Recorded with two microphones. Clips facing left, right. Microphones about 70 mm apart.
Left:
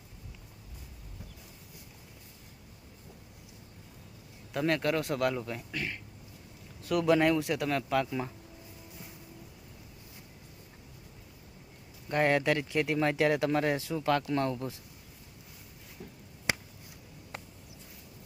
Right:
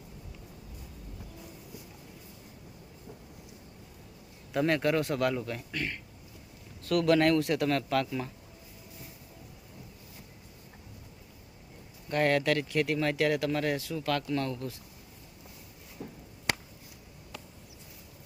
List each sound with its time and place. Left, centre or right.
4.5 s speech: centre
12.0 s speech: centre